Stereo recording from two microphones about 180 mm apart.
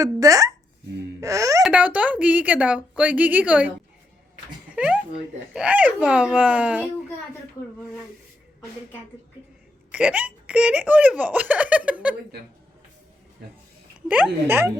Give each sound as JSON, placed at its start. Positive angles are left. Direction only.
{"t": 0.0, "sound": "speech", "side_deg": -20}
{"t": 1.2, "sound": "a sound", "side_deg": -20}
{"t": 1.6, "sound": "speech", "side_deg": -5}
{"t": 4.7, "sound": "a sound", "side_deg": -5}
{"t": 5.5, "sound": "speech", "side_deg": -5}
{"t": 9.9, "sound": "speech", "side_deg": -5}
{"t": 14.4, "sound": "speech", "side_deg": -10}